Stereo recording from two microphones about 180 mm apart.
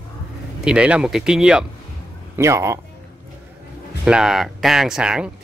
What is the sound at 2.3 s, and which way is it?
Speech, 15° right (ahead or behind).